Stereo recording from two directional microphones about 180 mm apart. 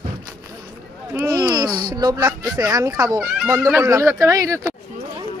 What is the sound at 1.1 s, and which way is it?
Speech, 15° right (ahead or behind).